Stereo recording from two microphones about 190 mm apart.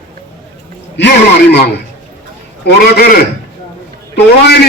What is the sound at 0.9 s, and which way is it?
A man's voice, 65° left (ahead or behind).